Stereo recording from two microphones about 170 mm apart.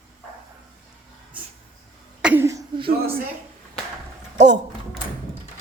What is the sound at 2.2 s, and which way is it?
Cough, 10° right (ahead or behind).